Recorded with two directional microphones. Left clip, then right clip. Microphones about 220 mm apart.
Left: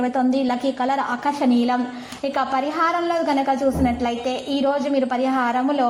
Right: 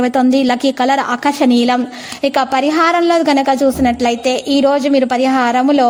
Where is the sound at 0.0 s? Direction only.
40° right (ahead or behind).